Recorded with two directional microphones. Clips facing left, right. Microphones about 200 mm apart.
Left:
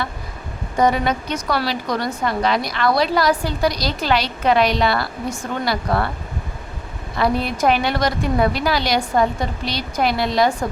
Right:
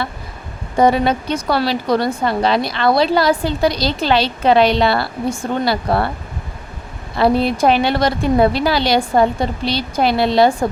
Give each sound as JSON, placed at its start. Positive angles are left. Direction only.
{"t": 0.8, "sound": "speech", "side_deg": -30}
{"t": 7.2, "sound": "speech", "side_deg": -30}